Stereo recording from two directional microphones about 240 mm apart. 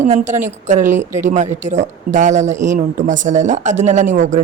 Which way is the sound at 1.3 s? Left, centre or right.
Right.